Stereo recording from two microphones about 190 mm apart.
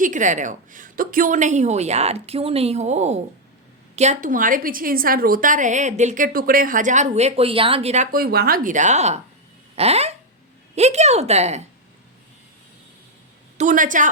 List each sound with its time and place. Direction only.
0.0 s a woman's voice: 40° right (ahead or behind)
8.1 s a woman's voice: 55° right (ahead or behind); by 9.2 s 35° right (ahead or behind)
9.7 s a sound: 35° right (ahead or behind)
10.8 s a woman's voice: 35° right (ahead or behind)
13.6 s a woman's voice: 45° right (ahead or behind)